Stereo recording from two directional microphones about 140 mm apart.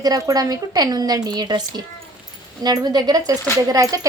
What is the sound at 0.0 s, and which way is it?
A woman's voice, 25° right (ahead or behind).